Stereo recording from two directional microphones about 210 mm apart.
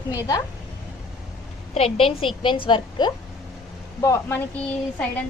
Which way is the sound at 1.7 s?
25° left (ahead or behind).